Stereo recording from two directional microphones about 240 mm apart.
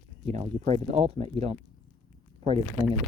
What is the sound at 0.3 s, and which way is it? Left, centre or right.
Speech, right.